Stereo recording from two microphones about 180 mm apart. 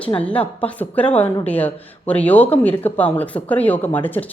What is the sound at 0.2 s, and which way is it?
Speech, 5° left (ahead or behind).